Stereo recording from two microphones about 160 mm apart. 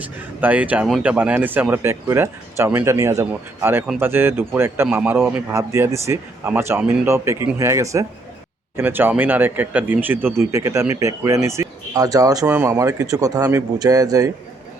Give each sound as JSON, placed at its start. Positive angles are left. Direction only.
{"t": 0.0, "sound": "a man's voice", "side_deg": -10}